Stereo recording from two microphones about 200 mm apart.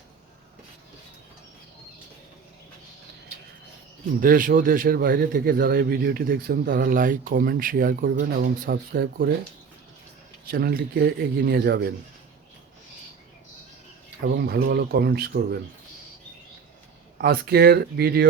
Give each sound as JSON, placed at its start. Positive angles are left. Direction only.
{"t": 4.2, "sound": "a man's voice", "side_deg": -45}
{"t": 10.4, "sound": "a man's voice", "side_deg": -50}
{"t": 14.2, "sound": "a man's voice", "side_deg": -55}
{"t": 17.2, "sound": "a man's voice", "side_deg": -50}